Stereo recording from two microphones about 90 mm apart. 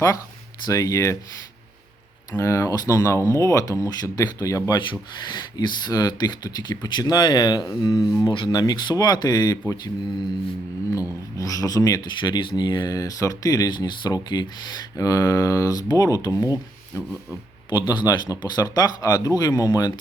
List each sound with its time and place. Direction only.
0.6 s speech: 40° left (ahead or behind)
2.3 s speech: 35° left (ahead or behind)
4.7 s speech: 60° left (ahead or behind)
10.9 s speech: 40° left (ahead or behind)
14.9 s speech: 40° left (ahead or behind)
17.7 s speech: 55° left (ahead or behind)